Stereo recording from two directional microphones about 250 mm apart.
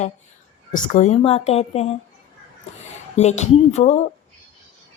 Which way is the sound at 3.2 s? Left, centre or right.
Left.